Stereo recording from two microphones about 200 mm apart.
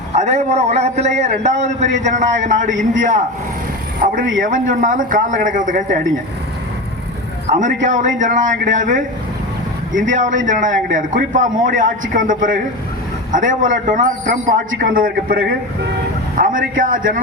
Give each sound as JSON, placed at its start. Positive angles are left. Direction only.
{"t": 0.1, "sound": "a man's voice", "side_deg": -35}
{"t": 7.5, "sound": "a man's voice", "side_deg": -40}